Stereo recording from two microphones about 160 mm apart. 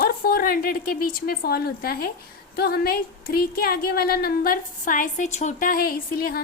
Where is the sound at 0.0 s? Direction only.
65° left (ahead or behind).